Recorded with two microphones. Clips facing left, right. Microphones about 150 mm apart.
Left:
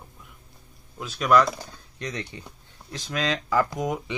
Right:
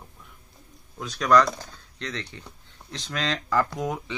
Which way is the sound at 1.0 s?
10° left (ahead or behind).